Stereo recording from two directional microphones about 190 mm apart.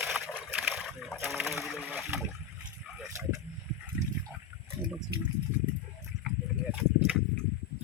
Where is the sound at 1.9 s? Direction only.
10° right (ahead or behind).